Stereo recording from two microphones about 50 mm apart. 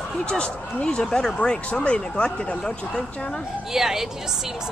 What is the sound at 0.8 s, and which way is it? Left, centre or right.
Speech, centre.